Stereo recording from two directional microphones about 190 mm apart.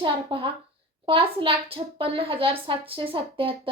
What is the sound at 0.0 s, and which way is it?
A child's voice, 25° right (ahead or behind).